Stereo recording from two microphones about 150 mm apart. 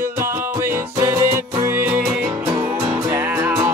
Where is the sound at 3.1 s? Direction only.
15° right (ahead or behind).